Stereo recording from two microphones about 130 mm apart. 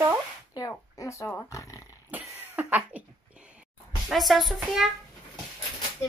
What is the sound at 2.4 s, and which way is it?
Speech, 15° right (ahead or behind).